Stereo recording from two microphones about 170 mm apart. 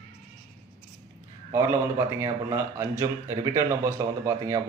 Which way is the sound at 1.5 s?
15° right (ahead or behind).